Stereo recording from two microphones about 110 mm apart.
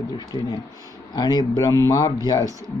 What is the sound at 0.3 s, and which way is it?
Speech, 40° left (ahead or behind).